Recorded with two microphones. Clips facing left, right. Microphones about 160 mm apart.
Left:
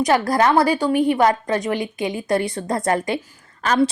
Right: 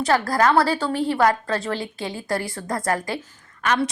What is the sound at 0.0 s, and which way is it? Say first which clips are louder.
A woman's voice: left 2 dB; 20° left (ahead or behind).